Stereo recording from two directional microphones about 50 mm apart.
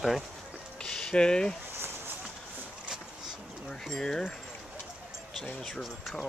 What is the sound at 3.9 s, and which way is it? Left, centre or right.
Speech, centre.